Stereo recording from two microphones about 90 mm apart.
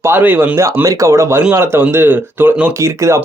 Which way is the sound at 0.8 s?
35° right (ahead or behind).